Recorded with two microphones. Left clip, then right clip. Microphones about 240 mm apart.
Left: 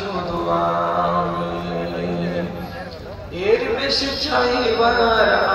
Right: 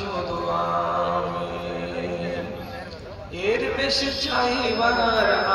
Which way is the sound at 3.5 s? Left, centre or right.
Right.